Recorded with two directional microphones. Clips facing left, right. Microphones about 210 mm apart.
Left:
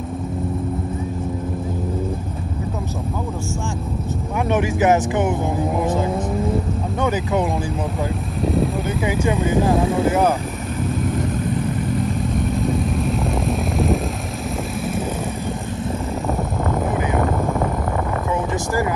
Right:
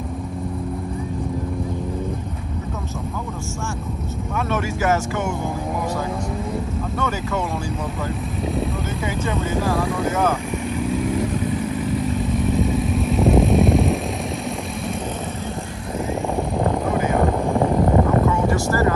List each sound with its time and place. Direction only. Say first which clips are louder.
4.5 s speech: left 5 dB; 15° left (ahead or behind)
7.0 s speech: left 5 dB; 15° left (ahead or behind)
8.4 s speech: left 5 dB; centre (ahead or behind)
9.0 s speech: left 5 dB; 15° left (ahead or behind)
11.9 s vehicle: even; centre (ahead or behind)
17.7 s a sound: right 6 dB; 25° right (ahead or behind)
18.5 s a sound: right 2 dB; 15° left (ahead or behind)